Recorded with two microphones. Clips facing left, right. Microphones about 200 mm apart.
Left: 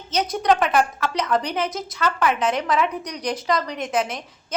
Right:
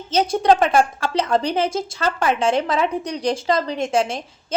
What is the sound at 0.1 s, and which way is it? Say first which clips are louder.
A woman's voice: right 4 dB; 30° right (ahead or behind).